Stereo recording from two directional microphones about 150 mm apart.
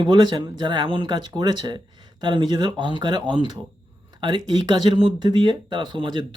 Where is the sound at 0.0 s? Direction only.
30° right (ahead or behind).